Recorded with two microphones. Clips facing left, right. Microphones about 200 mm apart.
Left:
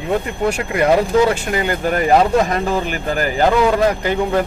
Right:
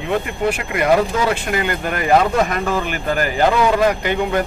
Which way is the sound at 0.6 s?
35° left (ahead or behind).